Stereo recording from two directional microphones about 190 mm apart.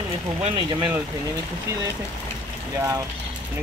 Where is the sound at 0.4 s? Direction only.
30° right (ahead or behind).